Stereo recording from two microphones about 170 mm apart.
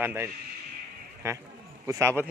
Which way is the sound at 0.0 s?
15° right (ahead or behind).